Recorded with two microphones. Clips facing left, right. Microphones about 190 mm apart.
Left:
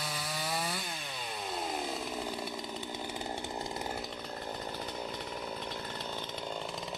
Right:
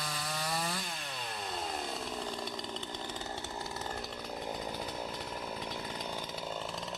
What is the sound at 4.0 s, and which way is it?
Chainsaw, centre (ahead or behind).